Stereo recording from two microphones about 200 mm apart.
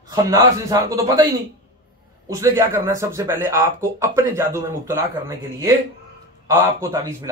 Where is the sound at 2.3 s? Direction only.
15° right (ahead or behind).